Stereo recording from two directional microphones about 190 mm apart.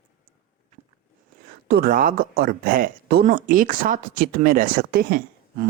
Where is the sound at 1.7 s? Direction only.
50° right (ahead or behind).